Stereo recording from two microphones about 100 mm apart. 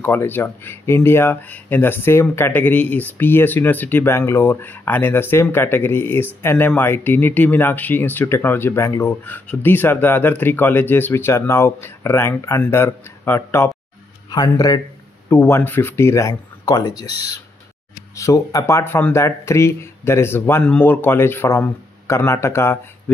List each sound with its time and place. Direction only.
0.0 s speech: 20° left (ahead or behind)
9.2 s speech: 15° left (ahead or behind)
14.3 s speech: 40° left (ahead or behind)
15.2 s speech: 25° left (ahead or behind)
16.7 s speech: 40° left (ahead or behind)
18.1 s speech: 30° left (ahead or behind)